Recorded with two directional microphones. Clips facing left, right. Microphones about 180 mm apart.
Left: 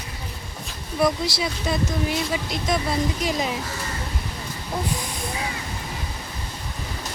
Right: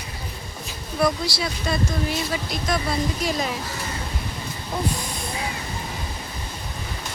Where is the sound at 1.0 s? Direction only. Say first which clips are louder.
Left 1 dB; 20° left (ahead or behind).